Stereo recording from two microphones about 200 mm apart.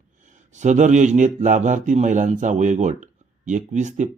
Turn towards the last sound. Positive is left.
turn(degrees=-35)  # may be behind; listen again after turning